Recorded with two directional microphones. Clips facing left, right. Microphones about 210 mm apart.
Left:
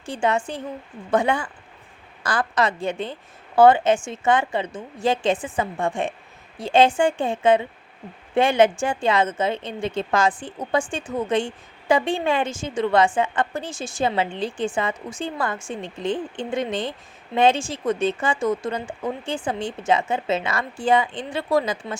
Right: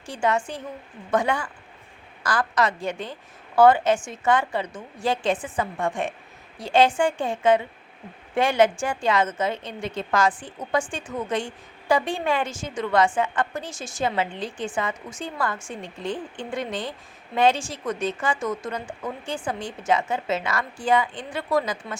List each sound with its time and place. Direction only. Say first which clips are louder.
0.1 s speech: left 2 dB; 25° left (ahead or behind)